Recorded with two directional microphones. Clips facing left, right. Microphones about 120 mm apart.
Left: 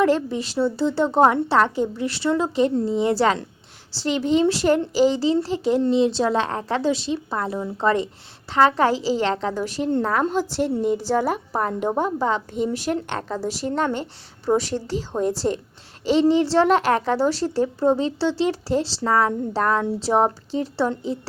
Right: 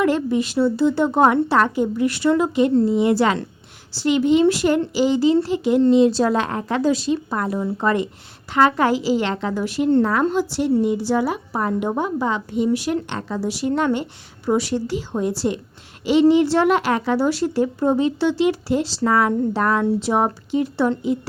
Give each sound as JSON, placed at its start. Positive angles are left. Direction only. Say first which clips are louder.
{"t": 0.0, "sound": "a woman's voice", "louder": "right 1 dB", "side_deg": 35}